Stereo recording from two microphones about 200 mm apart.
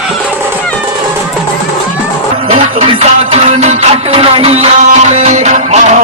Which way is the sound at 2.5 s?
30° right (ahead or behind).